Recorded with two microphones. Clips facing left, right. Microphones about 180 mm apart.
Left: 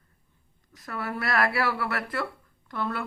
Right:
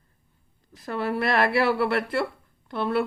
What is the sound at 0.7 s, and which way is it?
A woman's voice, 30° right (ahead or behind).